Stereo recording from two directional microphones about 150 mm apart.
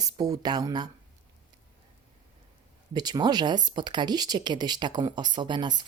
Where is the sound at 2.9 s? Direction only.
25° right (ahead or behind).